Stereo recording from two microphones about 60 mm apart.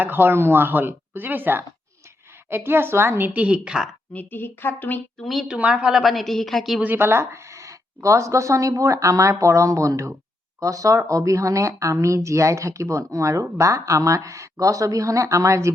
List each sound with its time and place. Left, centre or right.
0.0 s speech: right
3.4 s speech: centre
4.1 s a woman's voice: left
5.2 s a woman's voice: centre
5.5 s speech: centre
5.9 s a woman's voice: centre
6.8 s speech: right